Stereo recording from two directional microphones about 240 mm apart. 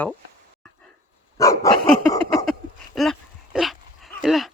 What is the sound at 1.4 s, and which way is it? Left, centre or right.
Speech, centre.